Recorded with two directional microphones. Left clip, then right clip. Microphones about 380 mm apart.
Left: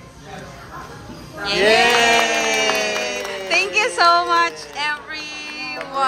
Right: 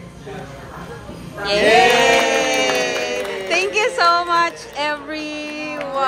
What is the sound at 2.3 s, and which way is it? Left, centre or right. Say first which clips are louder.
Music: right 1 dB; centre.